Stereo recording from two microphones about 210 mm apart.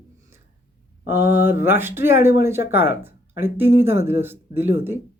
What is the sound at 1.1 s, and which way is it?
Speech, 50° left (ahead or behind).